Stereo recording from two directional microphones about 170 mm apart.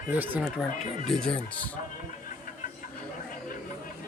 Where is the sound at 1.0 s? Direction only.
5° left (ahead or behind).